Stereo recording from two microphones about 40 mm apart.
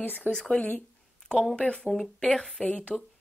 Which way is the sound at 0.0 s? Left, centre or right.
Left.